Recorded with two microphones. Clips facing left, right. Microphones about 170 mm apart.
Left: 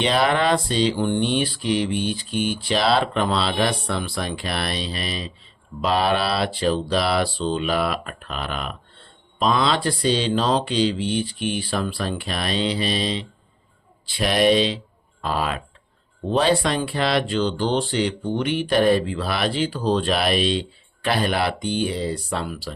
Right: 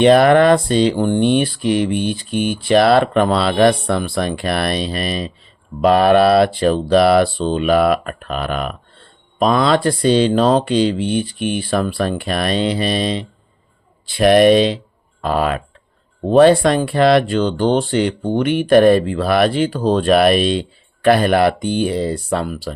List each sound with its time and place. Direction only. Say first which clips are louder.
0.0 s speech: right 10 dB; 50° right (ahead or behind)